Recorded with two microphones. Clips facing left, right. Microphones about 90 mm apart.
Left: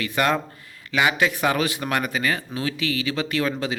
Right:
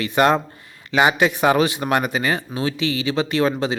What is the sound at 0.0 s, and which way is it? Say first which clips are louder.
Speech: right 5 dB; 25° right (ahead or behind).